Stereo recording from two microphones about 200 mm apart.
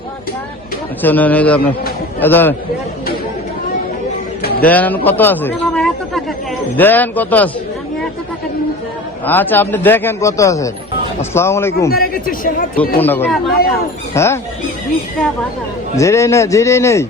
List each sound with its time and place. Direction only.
1.0 s a man's voice: 10° left (ahead or behind)
4.6 s a man's voice: 10° left (ahead or behind)
9.2 s a man's voice: 10° left (ahead or behind)
11.9 s speech: 45° left (ahead or behind)
13.0 s a man's voice: 10° left (ahead or behind)
16.0 s a man's voice: 15° left (ahead or behind)